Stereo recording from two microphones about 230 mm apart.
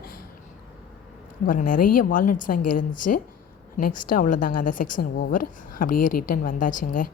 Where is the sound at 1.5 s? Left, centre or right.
Left.